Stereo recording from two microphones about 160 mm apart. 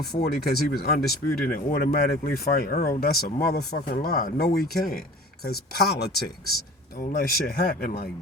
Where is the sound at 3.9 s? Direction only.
70° left (ahead or behind).